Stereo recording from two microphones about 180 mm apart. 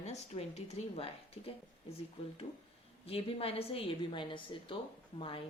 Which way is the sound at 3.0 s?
30° left (ahead or behind).